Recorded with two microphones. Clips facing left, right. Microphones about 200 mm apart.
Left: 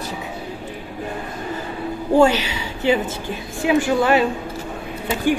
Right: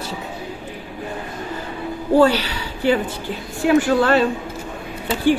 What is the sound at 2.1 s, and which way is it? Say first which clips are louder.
Speech: even; 15° left (ahead or behind).